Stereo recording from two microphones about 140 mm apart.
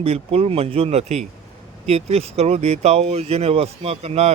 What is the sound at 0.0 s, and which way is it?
Speech, 45° right (ahead or behind).